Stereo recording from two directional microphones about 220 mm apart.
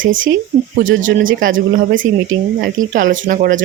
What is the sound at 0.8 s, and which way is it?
Speech, 60° right (ahead or behind).